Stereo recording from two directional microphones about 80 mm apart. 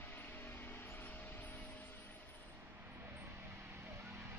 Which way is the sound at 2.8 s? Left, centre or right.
Right.